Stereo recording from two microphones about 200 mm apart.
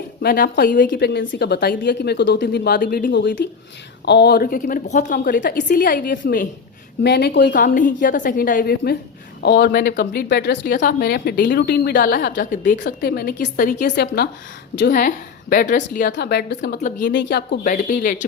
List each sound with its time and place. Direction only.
0.2 s speech: 50° left (ahead or behind)
3.1 s a woman's voice: 60° left (ahead or behind)
10.8 s a woman's voice: 50° left (ahead or behind)
12.8 s a woman's voice: 50° left (ahead or behind)